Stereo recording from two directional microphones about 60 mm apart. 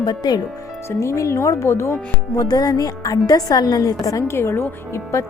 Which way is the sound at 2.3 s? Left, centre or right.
Left.